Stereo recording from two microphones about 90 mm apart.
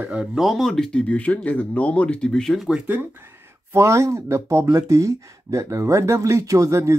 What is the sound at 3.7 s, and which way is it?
Speech, 35° right (ahead or behind).